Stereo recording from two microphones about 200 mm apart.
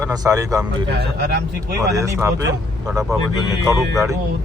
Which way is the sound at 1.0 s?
50° right (ahead or behind).